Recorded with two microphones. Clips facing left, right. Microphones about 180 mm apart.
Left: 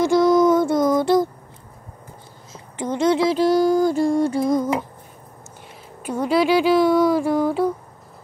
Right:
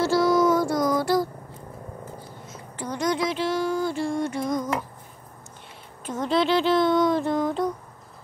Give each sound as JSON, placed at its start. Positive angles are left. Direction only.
{"t": 0.0, "sound": "child singing", "side_deg": 20}
{"t": 2.5, "sound": "a sound", "side_deg": 25}
{"t": 3.3, "sound": "music", "side_deg": 40}
{"t": 6.0, "sound": "speech", "side_deg": 10}